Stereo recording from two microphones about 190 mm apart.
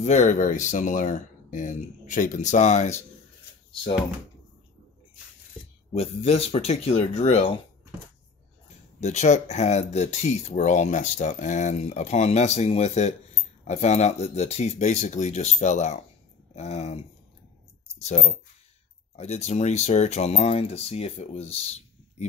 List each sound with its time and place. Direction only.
0.0 s speech: 40° left (ahead or behind)
5.9 s speech: 30° left (ahead or behind)
9.0 s speech: 35° left (ahead or behind)